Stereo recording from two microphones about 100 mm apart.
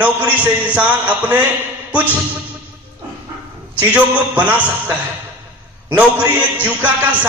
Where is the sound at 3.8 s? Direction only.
15° right (ahead or behind).